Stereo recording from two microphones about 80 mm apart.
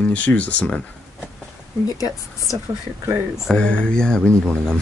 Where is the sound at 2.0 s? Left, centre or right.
Left.